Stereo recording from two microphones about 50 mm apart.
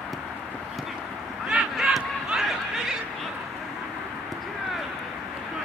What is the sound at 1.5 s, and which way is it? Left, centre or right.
Honk, centre.